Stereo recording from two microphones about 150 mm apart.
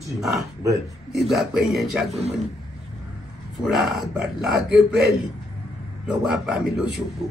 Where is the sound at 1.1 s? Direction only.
Centre (ahead or behind).